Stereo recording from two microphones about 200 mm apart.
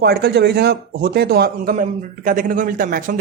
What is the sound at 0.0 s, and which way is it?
Speech, 55° right (ahead or behind).